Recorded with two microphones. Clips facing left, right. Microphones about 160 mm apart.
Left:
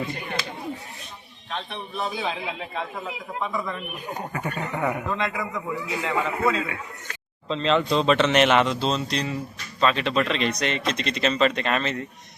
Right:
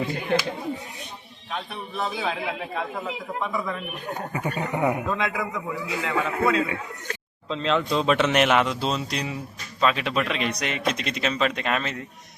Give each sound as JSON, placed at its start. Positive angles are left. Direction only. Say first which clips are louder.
{"t": 0.1, "sound": "a sound", "louder": "right 7 dB", "side_deg": 0}
{"t": 1.5, "sound": "a man's voice", "louder": "even", "side_deg": -5}
{"t": 4.3, "sound": "a man's voice", "louder": "right 3 dB", "side_deg": -15}